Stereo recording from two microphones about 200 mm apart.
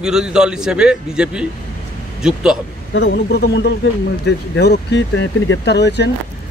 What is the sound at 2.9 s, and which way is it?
Speech, 55° left (ahead or behind).